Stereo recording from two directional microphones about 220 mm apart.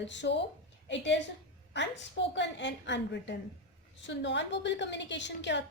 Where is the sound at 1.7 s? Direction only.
55° left (ahead or behind).